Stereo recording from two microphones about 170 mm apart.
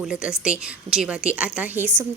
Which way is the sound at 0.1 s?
5° right (ahead or behind).